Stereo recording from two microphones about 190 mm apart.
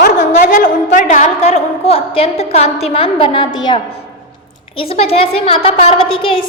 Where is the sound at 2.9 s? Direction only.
30° left (ahead or behind).